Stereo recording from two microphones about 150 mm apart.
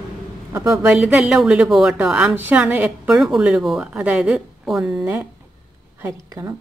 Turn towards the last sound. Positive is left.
turn(degrees=-20)  # may be behind; listen again after turning